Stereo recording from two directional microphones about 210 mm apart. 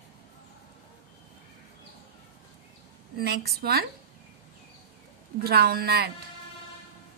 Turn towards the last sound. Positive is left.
turn(degrees=-50)  # may be behind; listen again after turning